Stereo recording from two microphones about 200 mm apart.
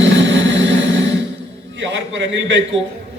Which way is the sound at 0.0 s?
65° right (ahead or behind).